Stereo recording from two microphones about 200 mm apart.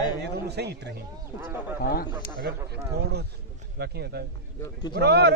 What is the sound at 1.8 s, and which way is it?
Speech, 45° left (ahead or behind).